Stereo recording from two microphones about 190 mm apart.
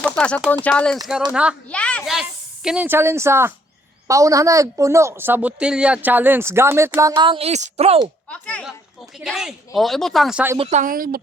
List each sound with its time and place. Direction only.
0.2 s speech: 5° left (ahead or behind)
1.3 s speech: 5° right (ahead or behind)
1.7 s speech: 5° left (ahead or behind)
2.6 s speech: 10° right (ahead or behind)
7.2 s speech: 30° right (ahead or behind)
8.3 s speech: 5° left (ahead or behind)
10.6 s a woman's voice: 35° right (ahead or behind)